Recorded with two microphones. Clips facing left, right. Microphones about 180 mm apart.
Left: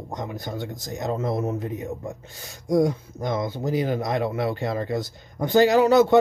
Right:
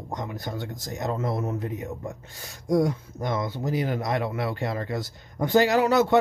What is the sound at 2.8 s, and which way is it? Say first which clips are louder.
Speech: left 3 dB; 20° left (ahead or behind).